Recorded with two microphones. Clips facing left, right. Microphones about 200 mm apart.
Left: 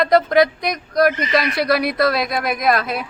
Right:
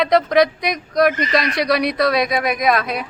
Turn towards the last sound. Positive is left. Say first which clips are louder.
# even
turn(degrees=0)  # may be behind; listen again after turning